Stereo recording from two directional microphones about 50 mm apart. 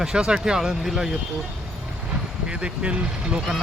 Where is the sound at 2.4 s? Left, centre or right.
Centre.